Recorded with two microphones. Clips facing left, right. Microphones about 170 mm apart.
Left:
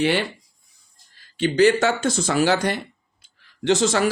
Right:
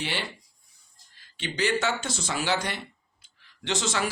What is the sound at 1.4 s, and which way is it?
Speech, 45° left (ahead or behind).